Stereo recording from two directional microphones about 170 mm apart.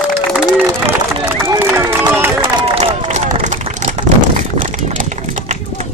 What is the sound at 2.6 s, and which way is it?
Run, 30° right (ahead or behind).